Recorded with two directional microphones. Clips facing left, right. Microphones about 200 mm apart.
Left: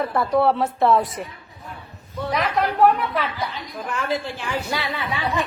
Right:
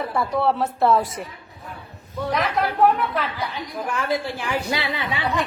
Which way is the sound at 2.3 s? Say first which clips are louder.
Left 1 dB; centre (ahead or behind).